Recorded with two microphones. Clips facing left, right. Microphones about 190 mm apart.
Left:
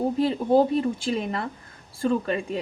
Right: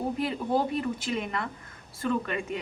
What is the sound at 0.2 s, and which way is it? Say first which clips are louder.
A woman's voice: left 9 dB; 30° left (ahead or behind).